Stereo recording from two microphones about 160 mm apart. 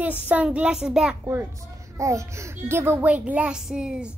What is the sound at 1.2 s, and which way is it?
A child's voice, 15° right (ahead or behind).